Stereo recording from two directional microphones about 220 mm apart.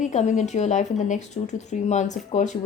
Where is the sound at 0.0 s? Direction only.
35° left (ahead or behind).